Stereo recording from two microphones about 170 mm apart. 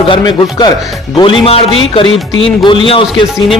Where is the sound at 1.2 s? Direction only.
35° left (ahead or behind).